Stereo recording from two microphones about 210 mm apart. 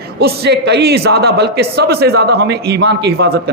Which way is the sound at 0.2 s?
50° right (ahead or behind).